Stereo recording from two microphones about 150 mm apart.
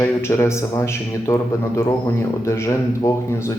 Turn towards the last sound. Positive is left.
turn(degrees=20)  # may be behind; listen again after turning